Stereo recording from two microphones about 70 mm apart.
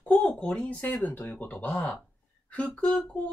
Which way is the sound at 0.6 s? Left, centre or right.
Left.